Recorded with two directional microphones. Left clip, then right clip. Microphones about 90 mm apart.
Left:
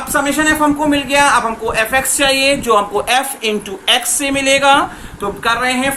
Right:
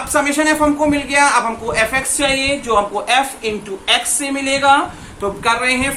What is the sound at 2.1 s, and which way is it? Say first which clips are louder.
A woman's voice: left 4 dB; 55° left (ahead or behind).